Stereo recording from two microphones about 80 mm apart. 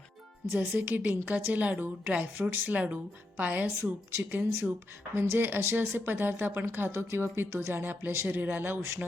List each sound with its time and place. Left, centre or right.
0.5 s a woman's voice: right